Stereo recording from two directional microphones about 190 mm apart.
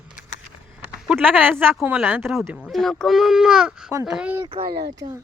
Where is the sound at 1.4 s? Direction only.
10° right (ahead or behind).